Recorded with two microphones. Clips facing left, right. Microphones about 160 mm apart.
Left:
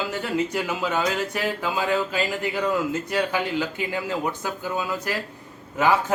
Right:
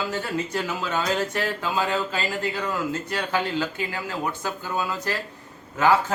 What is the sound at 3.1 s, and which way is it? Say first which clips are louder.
A man's voice: left 2 dB; 15° left (ahead or behind).